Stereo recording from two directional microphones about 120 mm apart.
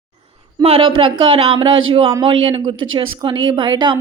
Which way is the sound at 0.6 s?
50° right (ahead or behind).